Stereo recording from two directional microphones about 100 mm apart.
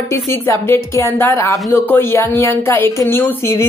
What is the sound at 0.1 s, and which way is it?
Speech, 30° left (ahead or behind).